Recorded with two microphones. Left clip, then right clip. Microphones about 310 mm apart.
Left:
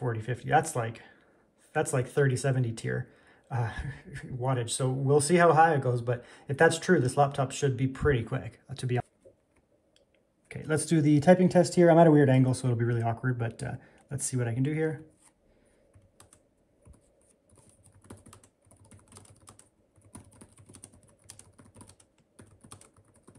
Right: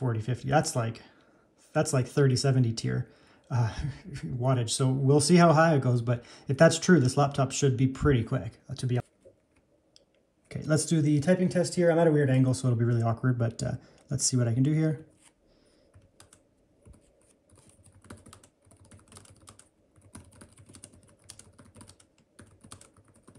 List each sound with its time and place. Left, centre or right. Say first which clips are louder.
0.1 s speech: left 2 dB; centre
1.8 s speech: right 1 dB; centre
10.5 s speech: even; centre
17.6 s typing: right 2 dB; centre